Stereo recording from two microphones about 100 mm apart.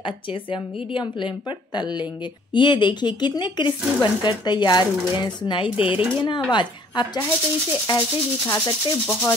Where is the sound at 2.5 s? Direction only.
50° left (ahead or behind).